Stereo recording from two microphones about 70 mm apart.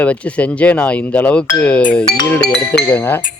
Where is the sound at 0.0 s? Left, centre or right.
Centre.